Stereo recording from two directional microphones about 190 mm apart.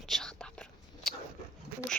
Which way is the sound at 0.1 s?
5° left (ahead or behind).